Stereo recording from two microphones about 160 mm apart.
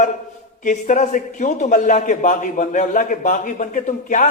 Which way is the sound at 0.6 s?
50° left (ahead or behind).